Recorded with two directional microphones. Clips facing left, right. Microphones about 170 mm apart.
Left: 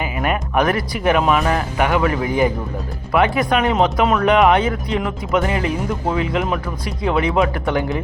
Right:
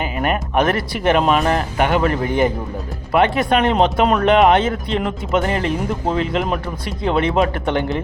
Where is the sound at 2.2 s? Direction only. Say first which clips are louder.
Even; 10° left (ahead or behind).